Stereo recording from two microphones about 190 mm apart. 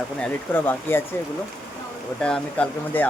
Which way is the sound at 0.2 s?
10° left (ahead or behind).